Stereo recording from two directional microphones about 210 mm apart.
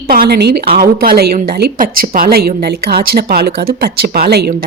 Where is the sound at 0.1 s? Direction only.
45° right (ahead or behind).